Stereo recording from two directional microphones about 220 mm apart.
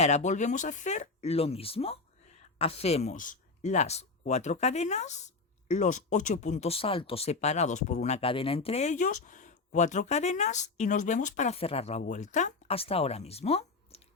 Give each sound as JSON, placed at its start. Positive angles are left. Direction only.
{"t": 0.0, "sound": "speech", "side_deg": 30}